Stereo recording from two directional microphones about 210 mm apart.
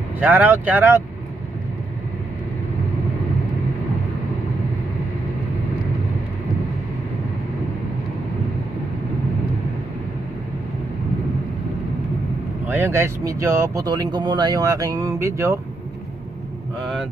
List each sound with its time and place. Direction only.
0.2 s speech: 10° right (ahead or behind)
12.6 s speech: 10° right (ahead or behind)
16.8 s speech: centre (ahead or behind)